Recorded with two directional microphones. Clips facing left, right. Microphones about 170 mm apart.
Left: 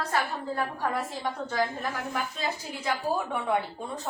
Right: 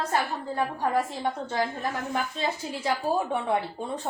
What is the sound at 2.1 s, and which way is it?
A woman's voice, 30° right (ahead or behind).